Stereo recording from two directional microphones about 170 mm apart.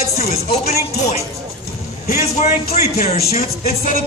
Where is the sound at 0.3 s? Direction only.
40° left (ahead or behind).